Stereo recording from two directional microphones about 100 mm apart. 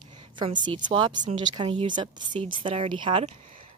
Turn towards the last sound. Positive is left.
turn(degrees=-60)  # may be behind; listen again after turning